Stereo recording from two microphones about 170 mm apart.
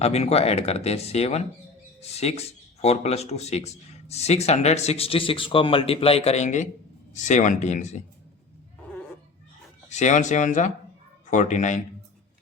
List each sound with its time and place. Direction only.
0.0 s speech: 40° left (ahead or behind)
9.9 s speech: 45° left (ahead or behind)